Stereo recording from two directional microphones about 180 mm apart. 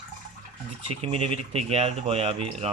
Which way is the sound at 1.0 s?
35° right (ahead or behind).